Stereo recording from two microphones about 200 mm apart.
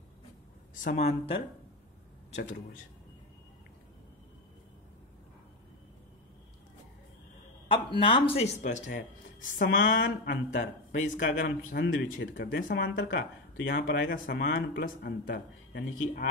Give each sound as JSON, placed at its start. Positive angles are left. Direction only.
{"t": 0.7, "sound": "speech", "side_deg": 40}
{"t": 8.0, "sound": "speech", "side_deg": 25}
{"t": 9.8, "sound": "speech", "side_deg": 65}
{"t": 10.5, "sound": "speech", "side_deg": 40}
{"t": 11.2, "sound": "speech", "side_deg": 55}